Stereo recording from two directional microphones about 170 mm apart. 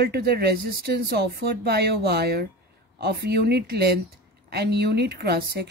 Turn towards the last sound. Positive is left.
turn(degrees=-70)  # may be behind; listen again after turning